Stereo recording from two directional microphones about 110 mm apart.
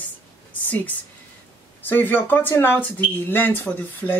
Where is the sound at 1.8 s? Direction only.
20° left (ahead or behind).